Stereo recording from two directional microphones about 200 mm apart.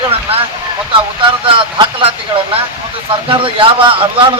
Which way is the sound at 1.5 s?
25° right (ahead or behind).